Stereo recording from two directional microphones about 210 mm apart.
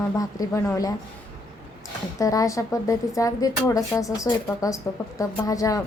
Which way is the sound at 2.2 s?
15° left (ahead or behind).